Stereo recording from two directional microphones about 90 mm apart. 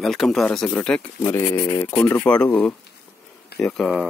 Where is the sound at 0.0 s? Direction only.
Centre (ahead or behind).